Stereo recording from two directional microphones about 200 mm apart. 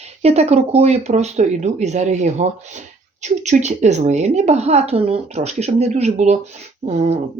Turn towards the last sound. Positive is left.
turn(degrees=-35)  # may be behind; listen again after turning